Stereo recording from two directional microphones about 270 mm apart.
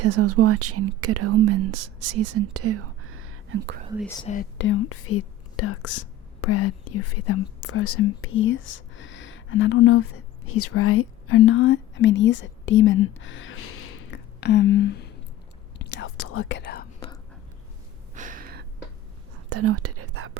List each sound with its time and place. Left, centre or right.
0.0 s speech: right
4.2 s speech: left
4.5 s speech: left
14.1 s a sound: left
15.8 s speech: left
18.1 s gasp: right
19.5 s whispering: right